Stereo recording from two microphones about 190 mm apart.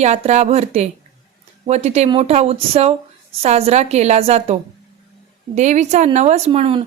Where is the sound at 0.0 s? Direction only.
35° right (ahead or behind).